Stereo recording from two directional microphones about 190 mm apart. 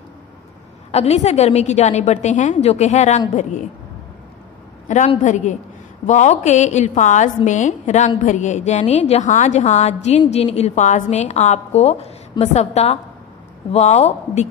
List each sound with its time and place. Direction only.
0.9 s a woman's voice: 35° left (ahead or behind)
4.8 s a woman's voice: 40° left (ahead or behind)